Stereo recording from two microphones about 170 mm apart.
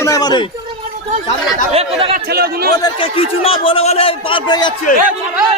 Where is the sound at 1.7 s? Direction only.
35° right (ahead or behind).